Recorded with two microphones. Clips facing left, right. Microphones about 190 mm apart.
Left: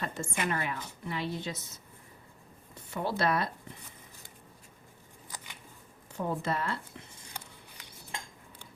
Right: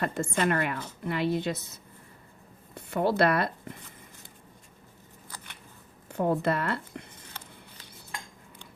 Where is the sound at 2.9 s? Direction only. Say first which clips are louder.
Right 6 dB; 60° right (ahead or behind).